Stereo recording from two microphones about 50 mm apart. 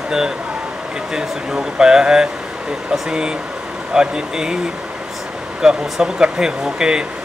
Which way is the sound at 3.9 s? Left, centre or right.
Centre.